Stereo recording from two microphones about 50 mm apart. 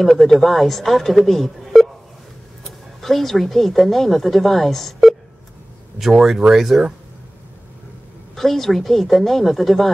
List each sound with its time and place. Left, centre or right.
0.0 s speech: centre
8.4 s speech: centre